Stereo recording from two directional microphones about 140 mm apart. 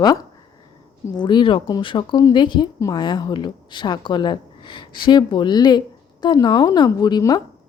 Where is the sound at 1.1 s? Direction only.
35° left (ahead or behind).